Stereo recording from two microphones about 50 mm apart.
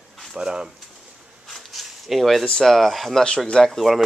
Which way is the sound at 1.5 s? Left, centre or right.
Centre.